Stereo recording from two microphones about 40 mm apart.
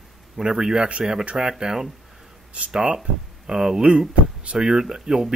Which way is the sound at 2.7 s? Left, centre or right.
Right.